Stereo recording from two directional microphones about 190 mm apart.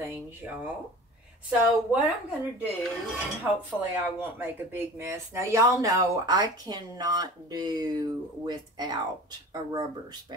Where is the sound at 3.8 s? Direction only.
10° right (ahead or behind).